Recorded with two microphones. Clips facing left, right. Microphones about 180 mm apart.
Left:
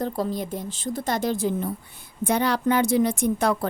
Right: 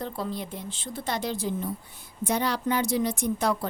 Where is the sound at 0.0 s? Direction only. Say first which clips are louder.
Left 6 dB; 45° left (ahead or behind).